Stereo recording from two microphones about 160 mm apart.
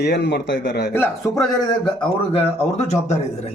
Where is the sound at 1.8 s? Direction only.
35° left (ahead or behind).